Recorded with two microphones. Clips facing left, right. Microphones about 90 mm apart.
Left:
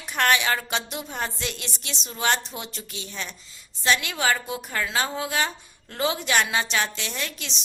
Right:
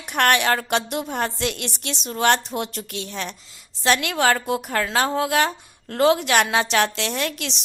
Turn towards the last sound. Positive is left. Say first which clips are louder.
# right 7 dB
turn(degrees=-65)  # may be behind; listen again after turning